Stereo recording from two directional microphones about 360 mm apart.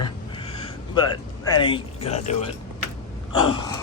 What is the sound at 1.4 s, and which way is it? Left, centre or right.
Speech, centre.